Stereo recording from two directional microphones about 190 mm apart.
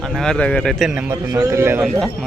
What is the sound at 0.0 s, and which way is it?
A man's voice, 5° left (ahead or behind).